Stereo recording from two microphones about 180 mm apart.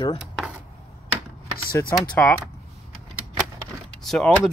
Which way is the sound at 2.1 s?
5° left (ahead or behind).